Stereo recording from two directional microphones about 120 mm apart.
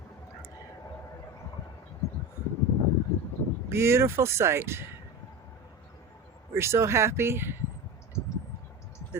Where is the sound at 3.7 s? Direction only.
20° right (ahead or behind).